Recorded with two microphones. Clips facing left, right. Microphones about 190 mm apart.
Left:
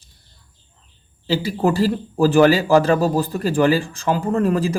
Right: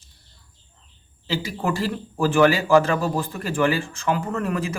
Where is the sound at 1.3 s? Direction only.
35° left (ahead or behind).